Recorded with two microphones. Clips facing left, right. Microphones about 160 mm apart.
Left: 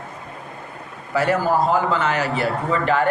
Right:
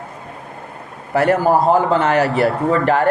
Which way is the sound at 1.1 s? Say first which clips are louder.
Right 5 dB; 55° right (ahead or behind).